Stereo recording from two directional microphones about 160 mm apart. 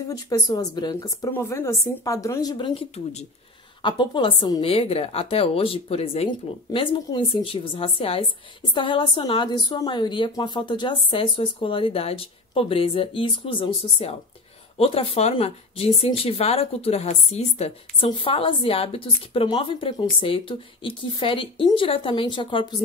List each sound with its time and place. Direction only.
0.1 s speech: 20° left (ahead or behind); by 3.3 s 40° left (ahead or behind)
3.8 s a woman's voice: 30° left (ahead or behind)